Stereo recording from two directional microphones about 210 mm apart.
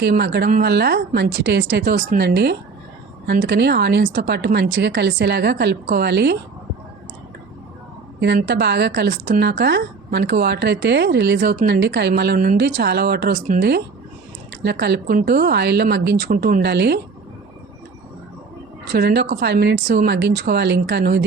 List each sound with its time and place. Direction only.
0.0 s a woman's voice: 50° right (ahead or behind)
8.2 s a woman's voice: 55° right (ahead or behind)
18.9 s a woman's voice: 50° right (ahead or behind)